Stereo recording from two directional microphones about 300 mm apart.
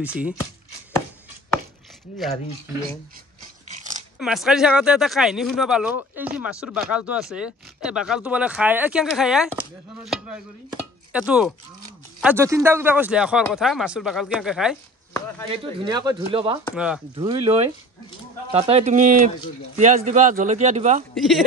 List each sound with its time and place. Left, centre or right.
0.0 s speech: centre
3.6 s a sound: right
4.2 s speech: centre
10.7 s chopping: centre
12.2 s speech: centre
15.8 s speech: centre
16.7 s speech: centre
17.1 s a man's voice: centre
21.1 s speech: centre